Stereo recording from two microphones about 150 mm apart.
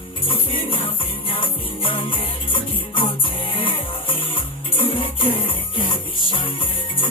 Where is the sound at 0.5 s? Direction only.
35° left (ahead or behind).